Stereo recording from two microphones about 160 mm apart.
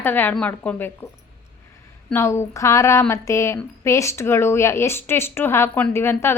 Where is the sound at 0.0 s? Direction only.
10° left (ahead or behind).